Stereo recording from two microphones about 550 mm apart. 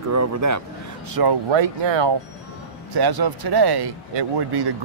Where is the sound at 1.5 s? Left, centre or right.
Right.